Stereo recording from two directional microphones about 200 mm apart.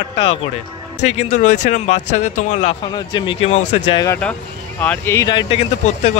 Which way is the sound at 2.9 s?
25° left (ahead or behind).